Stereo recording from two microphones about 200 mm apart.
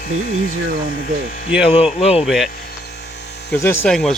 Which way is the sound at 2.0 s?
30° left (ahead or behind).